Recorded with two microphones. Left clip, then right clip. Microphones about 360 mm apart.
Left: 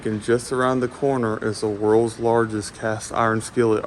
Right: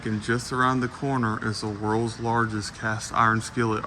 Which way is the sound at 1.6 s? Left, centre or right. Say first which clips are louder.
Left 11 dB; left.